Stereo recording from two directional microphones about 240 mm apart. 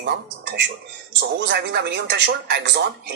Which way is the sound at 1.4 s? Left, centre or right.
Right.